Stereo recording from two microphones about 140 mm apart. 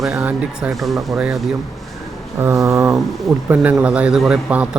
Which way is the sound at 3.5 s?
10° right (ahead or behind).